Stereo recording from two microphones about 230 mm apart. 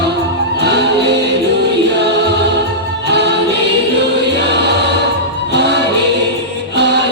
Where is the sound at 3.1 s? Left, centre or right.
Right.